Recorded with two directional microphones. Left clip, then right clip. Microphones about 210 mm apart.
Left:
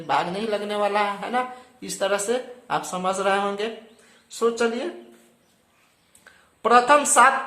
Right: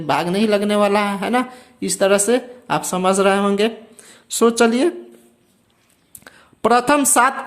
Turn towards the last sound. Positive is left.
turn(degrees=-55)  # may be behind; listen again after turning